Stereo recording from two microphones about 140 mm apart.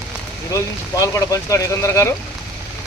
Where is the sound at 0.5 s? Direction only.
25° left (ahead or behind).